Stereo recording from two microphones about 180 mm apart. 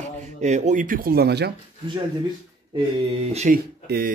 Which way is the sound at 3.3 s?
40° right (ahead or behind).